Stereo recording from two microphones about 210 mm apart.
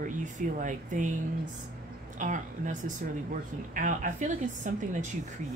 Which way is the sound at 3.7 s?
40° right (ahead or behind).